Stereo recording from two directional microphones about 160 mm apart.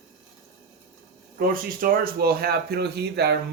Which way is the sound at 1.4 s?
70° right (ahead or behind).